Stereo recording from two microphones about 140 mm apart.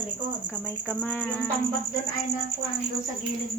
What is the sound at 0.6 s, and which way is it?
Speech, 15° left (ahead or behind).